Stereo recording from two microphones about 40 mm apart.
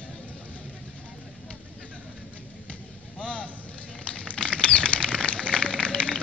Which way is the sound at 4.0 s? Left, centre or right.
Left.